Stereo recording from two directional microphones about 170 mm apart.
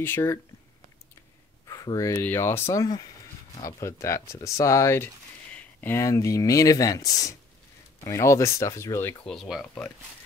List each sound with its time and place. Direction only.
0.0 s speech: 15° left (ahead or behind)
1.7 s speech: 20° left (ahead or behind)
9.2 s speech: centre (ahead or behind)